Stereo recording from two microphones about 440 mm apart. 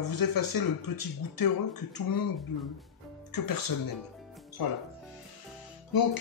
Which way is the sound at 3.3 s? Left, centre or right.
Left.